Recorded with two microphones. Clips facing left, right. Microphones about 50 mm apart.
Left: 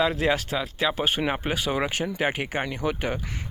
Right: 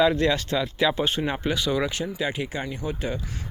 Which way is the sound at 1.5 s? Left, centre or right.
Left.